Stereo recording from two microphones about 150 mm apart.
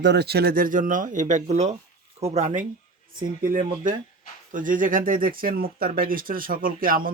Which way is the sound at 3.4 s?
70° right (ahead or behind).